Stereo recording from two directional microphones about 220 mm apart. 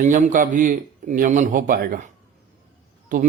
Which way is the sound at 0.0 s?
35° right (ahead or behind).